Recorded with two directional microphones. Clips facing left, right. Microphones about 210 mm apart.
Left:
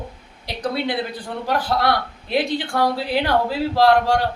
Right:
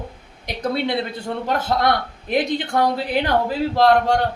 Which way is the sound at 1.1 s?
25° right (ahead or behind).